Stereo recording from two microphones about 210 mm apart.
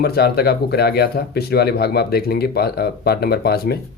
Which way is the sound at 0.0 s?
50° left (ahead or behind).